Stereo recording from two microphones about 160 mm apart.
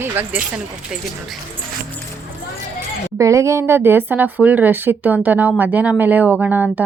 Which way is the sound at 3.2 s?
20° right (ahead or behind).